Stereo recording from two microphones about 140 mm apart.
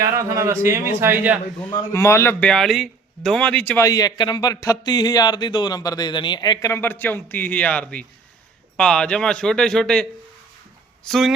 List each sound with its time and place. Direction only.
0.0 s speech: 20° right (ahead or behind)
1.9 s speech: 20° left (ahead or behind)
2.4 s a man's voice: 5° left (ahead or behind)
3.8 s a man's voice: 25° left (ahead or behind); by 11.3 s centre (ahead or behind)